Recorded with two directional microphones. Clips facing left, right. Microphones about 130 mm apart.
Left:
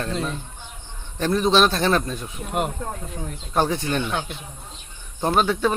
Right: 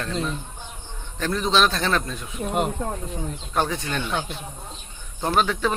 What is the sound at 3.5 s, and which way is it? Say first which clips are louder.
Speech: left 4 dB; 30° left (ahead or behind).